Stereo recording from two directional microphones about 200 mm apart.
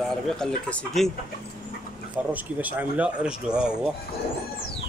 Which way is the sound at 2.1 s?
5° right (ahead or behind).